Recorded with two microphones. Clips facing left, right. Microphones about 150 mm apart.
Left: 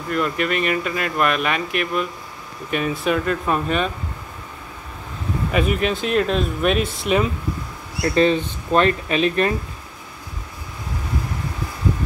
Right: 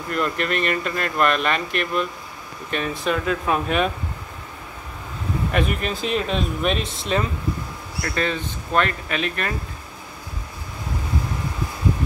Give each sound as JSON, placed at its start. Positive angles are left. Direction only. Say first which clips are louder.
{"t": 0.1, "sound": "speech", "louder": "left 2 dB", "side_deg": 5}
{"t": 5.5, "sound": "speech", "louder": "left 5 dB", "side_deg": 0}
{"t": 8.0, "sound": "speech", "louder": "left 8 dB", "side_deg": 25}